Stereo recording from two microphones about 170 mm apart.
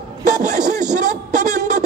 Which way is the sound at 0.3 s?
45° right (ahead or behind).